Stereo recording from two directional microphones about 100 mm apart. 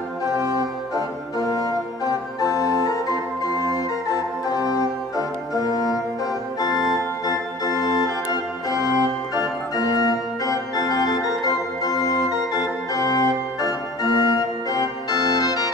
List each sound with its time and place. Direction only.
0.4 s organ: 35° right (ahead or behind)
0.9 s organ: 35° left (ahead or behind)